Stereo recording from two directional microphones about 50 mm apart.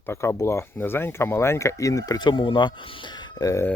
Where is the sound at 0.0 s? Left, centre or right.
Left.